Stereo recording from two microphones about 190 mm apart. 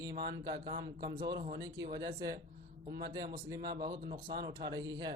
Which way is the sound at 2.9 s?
55° right (ahead or behind).